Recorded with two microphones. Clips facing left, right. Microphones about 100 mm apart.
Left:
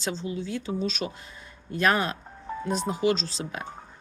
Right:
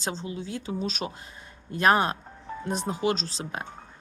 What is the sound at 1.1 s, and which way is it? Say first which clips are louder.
Speech: even; 30° right (ahead or behind).